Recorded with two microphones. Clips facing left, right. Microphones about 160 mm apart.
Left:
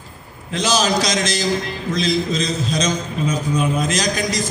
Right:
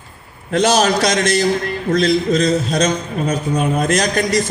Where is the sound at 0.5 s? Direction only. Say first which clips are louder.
Right 5 dB; 60° right (ahead or behind).